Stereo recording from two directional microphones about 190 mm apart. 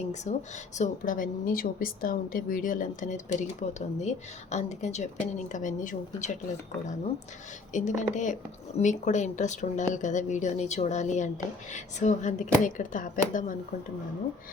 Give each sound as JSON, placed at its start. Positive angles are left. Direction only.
{"t": 0.0, "sound": "a woman's voice", "side_deg": 35}
{"t": 7.7, "sound": "a woman's voice", "side_deg": 40}